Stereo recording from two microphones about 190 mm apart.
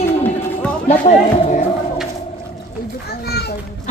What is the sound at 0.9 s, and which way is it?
Speech, 40° left (ahead or behind).